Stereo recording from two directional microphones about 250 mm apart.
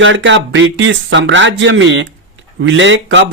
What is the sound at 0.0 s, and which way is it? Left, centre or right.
Speech, right.